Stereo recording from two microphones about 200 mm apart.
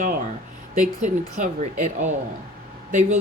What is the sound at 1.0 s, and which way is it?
Speech, 40° right (ahead or behind).